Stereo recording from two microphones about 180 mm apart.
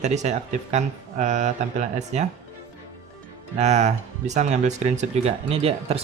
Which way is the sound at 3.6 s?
40° right (ahead or behind).